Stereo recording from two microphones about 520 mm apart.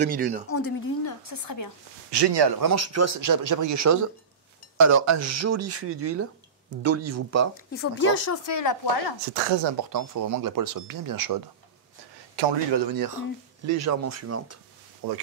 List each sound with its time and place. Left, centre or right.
0.0 s speech: centre
0.5 s a sound: left
1.3 s speech: left
2.0 s a man's voice: right
2.7 s speech: right
7.7 s speech: left
9.3 s speech: right
12.4 s a man's voice: right
13.7 s speech: right
15.0 s speech: right